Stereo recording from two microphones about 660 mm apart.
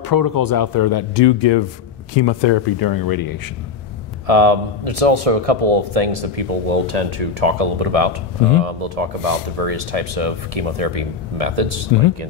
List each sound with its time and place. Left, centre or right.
0.0 s speech: left
4.3 s a man's voice: right